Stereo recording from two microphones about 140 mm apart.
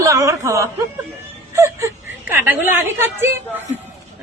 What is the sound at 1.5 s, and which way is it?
Whimper, 20° right (ahead or behind).